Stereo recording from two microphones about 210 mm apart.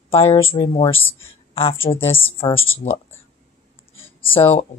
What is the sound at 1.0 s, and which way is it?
Speech, 70° left (ahead or behind).